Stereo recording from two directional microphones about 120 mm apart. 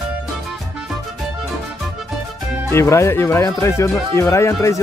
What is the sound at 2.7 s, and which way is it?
Speech, 20° left (ahead or behind).